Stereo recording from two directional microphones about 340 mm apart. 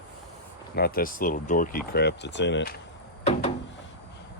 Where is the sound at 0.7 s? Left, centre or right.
Left.